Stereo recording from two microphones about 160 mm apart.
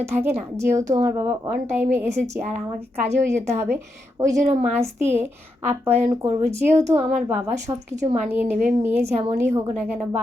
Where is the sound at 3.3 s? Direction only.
15° right (ahead or behind).